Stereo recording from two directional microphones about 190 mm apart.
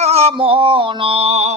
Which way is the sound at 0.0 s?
35° right (ahead or behind).